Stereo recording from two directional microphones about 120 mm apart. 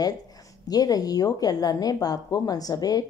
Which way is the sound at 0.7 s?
30° left (ahead or behind).